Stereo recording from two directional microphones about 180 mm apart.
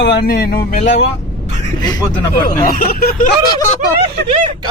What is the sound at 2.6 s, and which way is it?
Speech, 50° left (ahead or behind).